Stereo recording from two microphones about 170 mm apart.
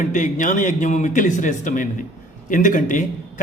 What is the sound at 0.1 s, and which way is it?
A man's voice, 50° left (ahead or behind).